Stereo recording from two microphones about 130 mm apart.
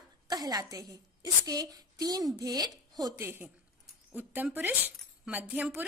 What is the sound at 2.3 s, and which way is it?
A woman's voice, 30° right (ahead or behind).